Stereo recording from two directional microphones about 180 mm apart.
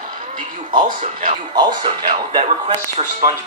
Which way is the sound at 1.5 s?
25° right (ahead or behind).